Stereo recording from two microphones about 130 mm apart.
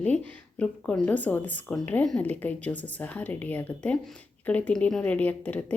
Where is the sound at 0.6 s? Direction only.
5° left (ahead or behind).